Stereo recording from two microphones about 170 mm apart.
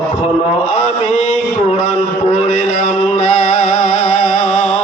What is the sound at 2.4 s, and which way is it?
Music, 45° left (ahead or behind).